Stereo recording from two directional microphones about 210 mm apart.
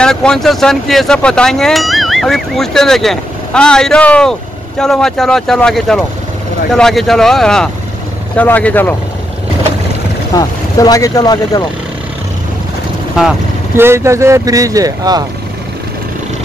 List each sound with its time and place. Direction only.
0.0 s speech: 5° left (ahead or behind)
10.3 s speech: 15° left (ahead or behind)
13.7 s speech: 10° right (ahead or behind)